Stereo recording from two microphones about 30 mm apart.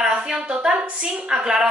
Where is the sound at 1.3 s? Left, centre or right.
Right.